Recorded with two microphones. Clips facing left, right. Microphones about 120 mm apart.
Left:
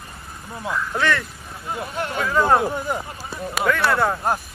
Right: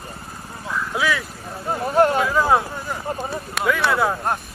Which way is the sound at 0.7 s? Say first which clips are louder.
Even; 5° right (ahead or behind).